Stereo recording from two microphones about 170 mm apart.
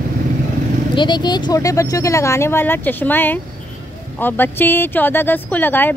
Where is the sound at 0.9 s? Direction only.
25° left (ahead or behind); by 5.9 s 10° left (ahead or behind).